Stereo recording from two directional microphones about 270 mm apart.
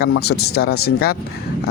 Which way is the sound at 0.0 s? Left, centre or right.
Left.